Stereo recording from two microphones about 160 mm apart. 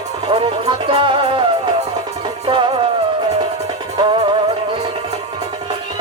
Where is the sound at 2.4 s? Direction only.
30° right (ahead or behind).